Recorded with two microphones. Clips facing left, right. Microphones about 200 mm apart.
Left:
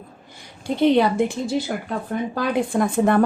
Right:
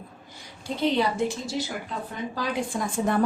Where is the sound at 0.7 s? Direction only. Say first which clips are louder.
Left 7 dB; 60° left (ahead or behind).